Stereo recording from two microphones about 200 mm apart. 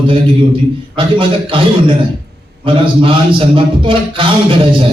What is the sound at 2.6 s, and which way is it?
A man's voice, 25° right (ahead or behind).